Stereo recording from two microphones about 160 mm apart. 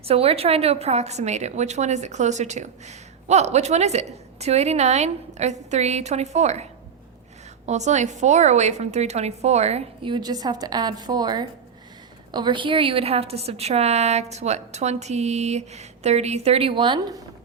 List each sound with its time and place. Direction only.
0.0 s a woman's voice: 40° right (ahead or behind)
7.7 s a woman's voice: 45° right (ahead or behind); by 17.2 s 30° right (ahead or behind)